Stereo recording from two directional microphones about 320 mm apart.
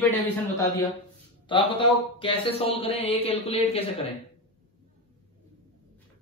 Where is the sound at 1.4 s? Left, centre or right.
Centre.